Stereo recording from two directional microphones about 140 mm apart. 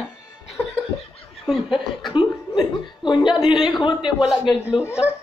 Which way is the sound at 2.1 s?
30° left (ahead or behind).